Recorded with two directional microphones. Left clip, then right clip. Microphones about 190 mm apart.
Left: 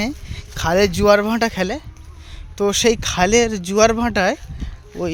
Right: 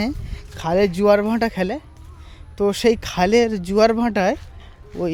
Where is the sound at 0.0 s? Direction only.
10° right (ahead or behind).